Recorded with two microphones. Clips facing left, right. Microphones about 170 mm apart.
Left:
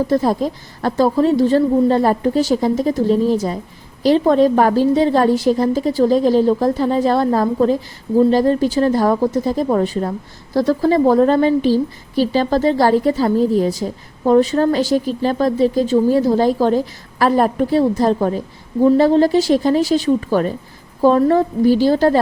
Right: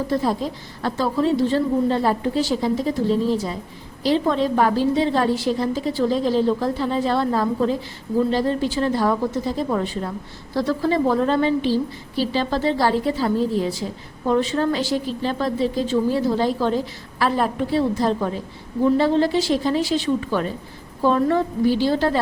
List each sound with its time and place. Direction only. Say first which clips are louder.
0.1 s a woman's voice: left 5 dB; 45° left (ahead or behind)